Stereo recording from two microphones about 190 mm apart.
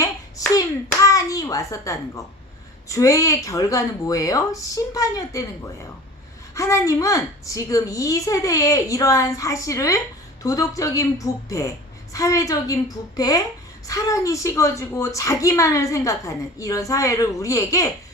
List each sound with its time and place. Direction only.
0.0 s hands: 20° left (ahead or behind)
2.9 s a woman's voice: 15° left (ahead or behind)